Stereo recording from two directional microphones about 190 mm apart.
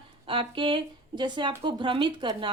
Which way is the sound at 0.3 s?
25° right (ahead or behind).